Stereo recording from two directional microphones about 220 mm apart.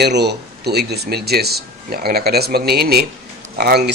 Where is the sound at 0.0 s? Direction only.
50° right (ahead or behind).